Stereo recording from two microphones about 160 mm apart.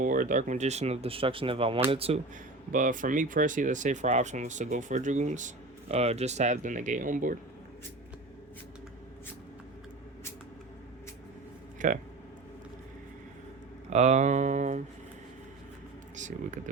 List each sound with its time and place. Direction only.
0.0 s speech: 55° right (ahead or behind); by 2.2 s 40° right (ahead or behind)
2.7 s speech: 55° right (ahead or behind)
11.8 s speech: 55° right (ahead or behind)
13.9 s speech: 45° right (ahead or behind)
16.1 s speech: 50° right (ahead or behind)